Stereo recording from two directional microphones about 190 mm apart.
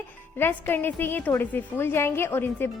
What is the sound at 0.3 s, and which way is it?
A woman's voice, 10° left (ahead or behind).